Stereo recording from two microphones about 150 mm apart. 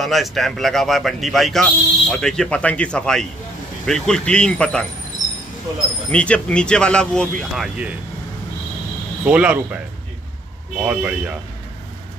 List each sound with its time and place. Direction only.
0.0 s speech: centre (ahead or behind)
6.1 s speech: 5° left (ahead or behind)
9.2 s speech: 10° right (ahead or behind)
10.8 s speech: 5° right (ahead or behind)